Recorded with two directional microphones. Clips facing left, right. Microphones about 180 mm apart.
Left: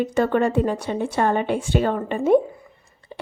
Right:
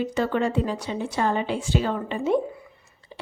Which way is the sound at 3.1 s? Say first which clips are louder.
Left 4 dB; 55° left (ahead or behind).